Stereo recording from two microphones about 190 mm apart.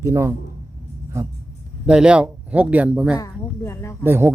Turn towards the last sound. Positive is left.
turn(degrees=-10)  # may be behind; listen again after turning